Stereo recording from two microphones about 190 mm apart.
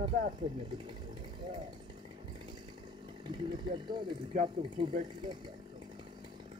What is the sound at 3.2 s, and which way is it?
Speech, 25° right (ahead or behind).